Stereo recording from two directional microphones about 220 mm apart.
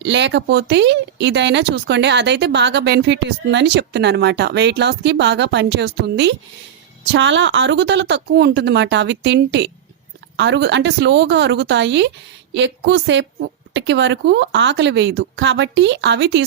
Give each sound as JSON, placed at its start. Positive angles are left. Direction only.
{"t": 0.0, "sound": "speech", "side_deg": -55}